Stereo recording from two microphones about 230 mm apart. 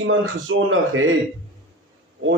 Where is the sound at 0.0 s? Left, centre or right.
Right.